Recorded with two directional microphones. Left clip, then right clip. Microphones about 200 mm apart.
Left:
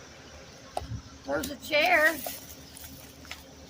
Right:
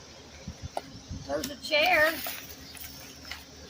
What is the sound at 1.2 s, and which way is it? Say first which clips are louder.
Speech: even; 40° left (ahead or behind).